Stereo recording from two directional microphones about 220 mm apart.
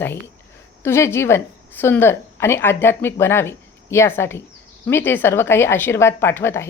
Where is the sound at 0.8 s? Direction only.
10° left (ahead or behind).